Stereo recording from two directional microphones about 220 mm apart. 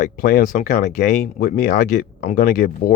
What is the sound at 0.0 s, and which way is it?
Speech, 40° left (ahead or behind).